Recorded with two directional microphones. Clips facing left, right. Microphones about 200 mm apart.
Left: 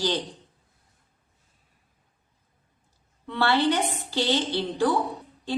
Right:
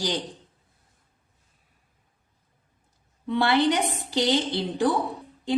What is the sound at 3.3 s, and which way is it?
Speech, 15° right (ahead or behind).